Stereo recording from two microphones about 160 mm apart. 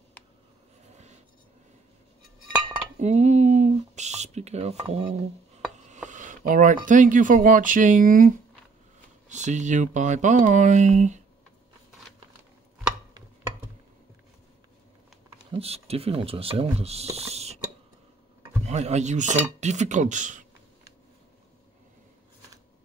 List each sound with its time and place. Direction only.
0.9 s writing: 45° right (ahead or behind)
3.0 s a sound: 45° right (ahead or behind)
6.0 s speech: 50° right (ahead or behind)
9.3 s speech: 50° right (ahead or behind)
15.2 s speech: 40° right (ahead or behind)
18.7 s speech: 45° right (ahead or behind)